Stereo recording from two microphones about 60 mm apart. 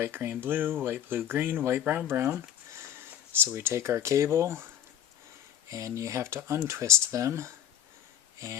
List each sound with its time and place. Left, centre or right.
0.0 s speech: right
2.0 s a sound: right
3.4 s speech: right
5.7 s speech: right